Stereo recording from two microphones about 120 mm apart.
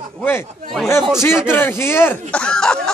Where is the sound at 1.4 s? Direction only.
20° left (ahead or behind).